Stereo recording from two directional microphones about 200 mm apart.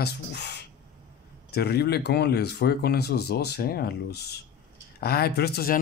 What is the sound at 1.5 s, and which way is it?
Speech, 55° left (ahead or behind).